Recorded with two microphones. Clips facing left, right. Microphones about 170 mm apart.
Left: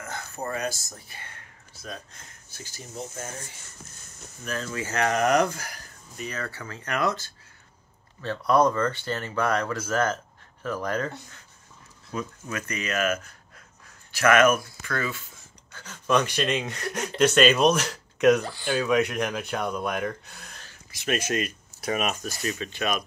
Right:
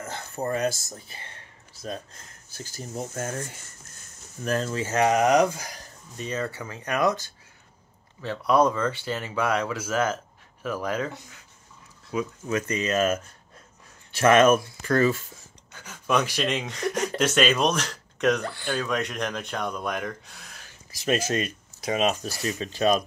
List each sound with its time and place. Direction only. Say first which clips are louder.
0.0 s speech: right 3 dB; 30° right (ahead or behind)
3.2 s speech: right 6 dB; 55° right (ahead or behind)
4.7 s speech: right 2 dB; 20° right (ahead or behind); by 11.3 s 5° right (ahead or behind)
12.4 s speech: right 6 dB; 20° right (ahead or behind)
14.8 s speech: right 9 dB; 40° right (ahead or behind)
15.7 s speech: left 1 dB; 10° right (ahead or behind)
18.4 s speech: right 2 dB; 55° right (ahead or behind)
18.7 s speech: left 5 dB; 5° left (ahead or behind)
20.9 s speech: right 2 dB; 35° right (ahead or behind)